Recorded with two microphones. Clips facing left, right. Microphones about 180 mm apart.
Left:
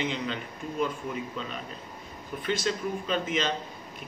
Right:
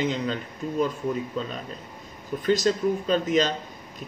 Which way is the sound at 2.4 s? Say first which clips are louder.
Right 7 dB; 40° right (ahead or behind).